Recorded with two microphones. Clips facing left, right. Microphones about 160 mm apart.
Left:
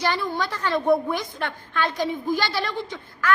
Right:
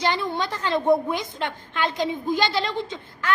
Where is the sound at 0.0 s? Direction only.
20° right (ahead or behind).